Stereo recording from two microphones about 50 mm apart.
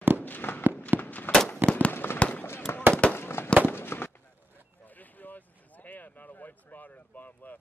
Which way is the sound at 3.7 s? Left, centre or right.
Left.